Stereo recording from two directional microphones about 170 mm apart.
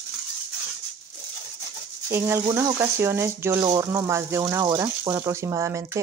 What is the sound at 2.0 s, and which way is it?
Speech, 15° right (ahead or behind).